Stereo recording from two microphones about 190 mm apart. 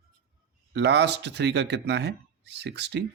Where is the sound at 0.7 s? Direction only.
65° right (ahead or behind).